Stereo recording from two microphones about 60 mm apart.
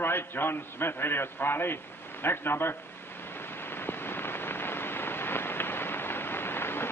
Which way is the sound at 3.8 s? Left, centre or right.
Left.